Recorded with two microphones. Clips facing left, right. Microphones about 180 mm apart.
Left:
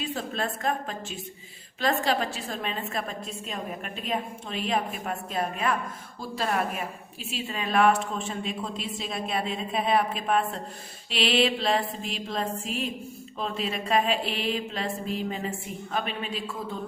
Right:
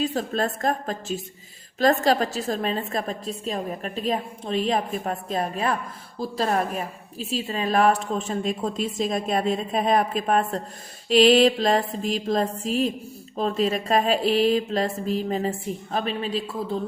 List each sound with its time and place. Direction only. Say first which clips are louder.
0.0 s a woman's voice: right 6 dB; 40° right (ahead or behind)